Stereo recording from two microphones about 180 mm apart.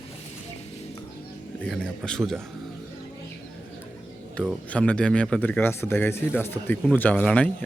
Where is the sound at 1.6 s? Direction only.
Centre (ahead or behind).